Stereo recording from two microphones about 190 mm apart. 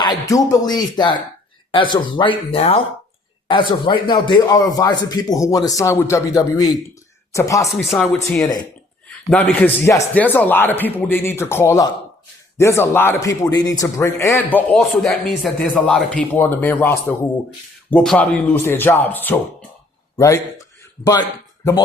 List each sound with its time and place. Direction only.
0.0 s a man's voice: 20° left (ahead or behind)
7.8 s speech: 5° left (ahead or behind)
8.4 s speech: 20° left (ahead or behind)
9.0 s a man's voice: 10° left (ahead or behind)
20.1 s a sound: 15° left (ahead or behind)